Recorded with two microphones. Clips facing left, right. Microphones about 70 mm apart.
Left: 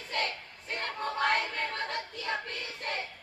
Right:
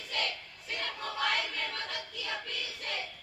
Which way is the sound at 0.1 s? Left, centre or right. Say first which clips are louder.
Left 3 dB; left.